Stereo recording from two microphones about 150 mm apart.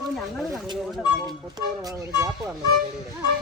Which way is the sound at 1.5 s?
25° right (ahead or behind).